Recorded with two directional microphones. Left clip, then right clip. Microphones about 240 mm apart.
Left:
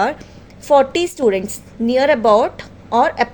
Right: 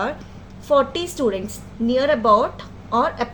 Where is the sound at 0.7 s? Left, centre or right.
Left.